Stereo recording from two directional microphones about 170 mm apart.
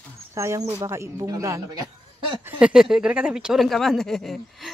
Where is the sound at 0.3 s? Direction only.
15° right (ahead or behind).